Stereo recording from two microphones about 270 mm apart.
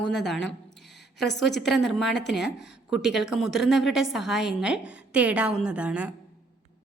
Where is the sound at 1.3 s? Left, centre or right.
Left.